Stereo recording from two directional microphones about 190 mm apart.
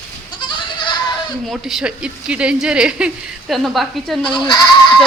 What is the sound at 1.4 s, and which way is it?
Speech, centre (ahead or behind).